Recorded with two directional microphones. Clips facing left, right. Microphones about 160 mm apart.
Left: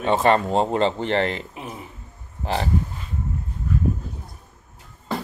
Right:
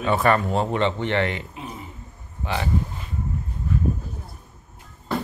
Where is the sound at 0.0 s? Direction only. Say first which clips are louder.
Left 2 dB; 25° left (ahead or behind).